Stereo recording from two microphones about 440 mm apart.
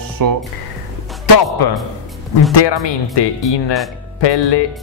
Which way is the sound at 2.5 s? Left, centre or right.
Left.